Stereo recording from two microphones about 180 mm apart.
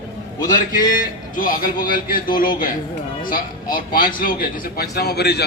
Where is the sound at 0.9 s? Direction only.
50° left (ahead or behind); by 5.4 s 65° left (ahead or behind).